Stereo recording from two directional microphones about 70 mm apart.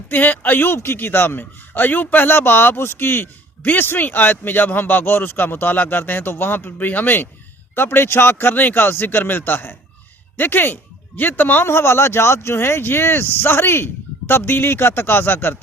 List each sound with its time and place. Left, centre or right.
0.1 s a man's voice: left